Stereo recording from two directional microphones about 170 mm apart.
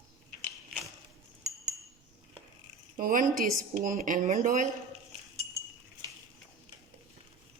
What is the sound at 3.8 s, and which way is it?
Speech, 50° right (ahead or behind).